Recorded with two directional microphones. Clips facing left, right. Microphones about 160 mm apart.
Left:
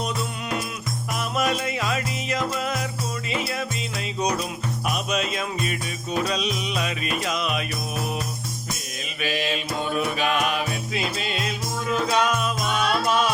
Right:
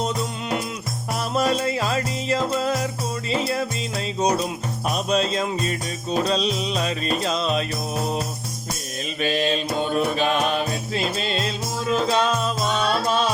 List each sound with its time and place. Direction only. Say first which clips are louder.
1.3 s music: right 4 dB; 30° right (ahead or behind)
4.9 s music: right 5 dB; 35° right (ahead or behind)
9.2 s music: right 4 dB; 35° right (ahead or behind)